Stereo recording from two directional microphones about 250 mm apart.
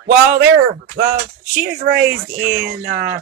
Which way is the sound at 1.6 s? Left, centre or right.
Right.